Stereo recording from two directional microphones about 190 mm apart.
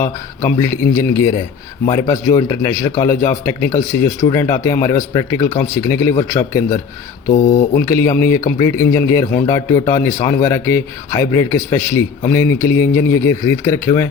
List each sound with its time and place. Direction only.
0.4 s speech: 15° left (ahead or behind)
7.3 s speech: 45° left (ahead or behind)
7.9 s speech: 15° left (ahead or behind)